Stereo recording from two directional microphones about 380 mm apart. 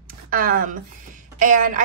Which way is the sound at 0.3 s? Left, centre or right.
Right.